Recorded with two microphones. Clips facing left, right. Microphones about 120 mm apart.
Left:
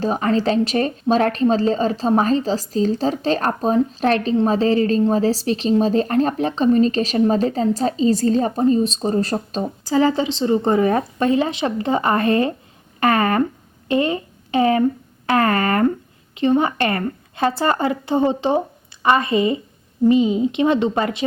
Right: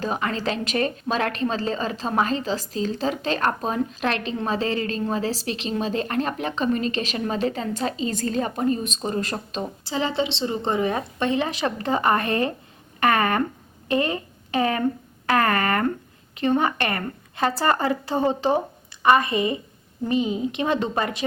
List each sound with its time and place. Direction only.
0.0 s a woman's voice: 35° left (ahead or behind)
11.3 s a woman's voice: 30° left (ahead or behind)